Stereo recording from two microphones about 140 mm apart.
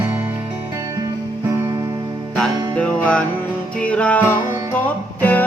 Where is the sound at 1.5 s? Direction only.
20° right (ahead or behind).